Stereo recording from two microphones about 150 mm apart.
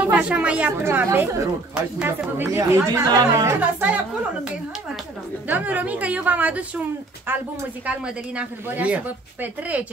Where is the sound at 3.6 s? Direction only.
10° right (ahead or behind).